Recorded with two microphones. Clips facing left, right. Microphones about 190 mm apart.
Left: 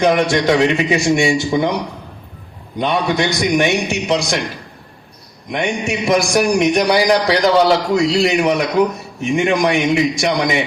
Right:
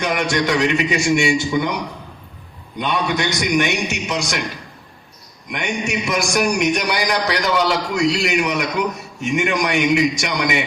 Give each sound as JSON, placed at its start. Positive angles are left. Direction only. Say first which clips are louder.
{"t": 0.0, "sound": "a man's voice", "louder": "left 6 dB", "side_deg": 35}
{"t": 2.7, "sound": "a man's voice", "louder": "left 4 dB", "side_deg": 35}
{"t": 5.5, "sound": "a man's voice", "louder": "left 4 dB", "side_deg": 30}